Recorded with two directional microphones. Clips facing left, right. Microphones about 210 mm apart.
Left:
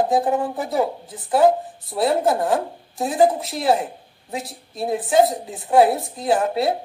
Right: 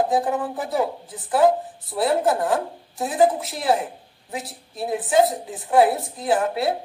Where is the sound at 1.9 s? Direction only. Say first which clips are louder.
Left 1 dB; 25° left (ahead or behind).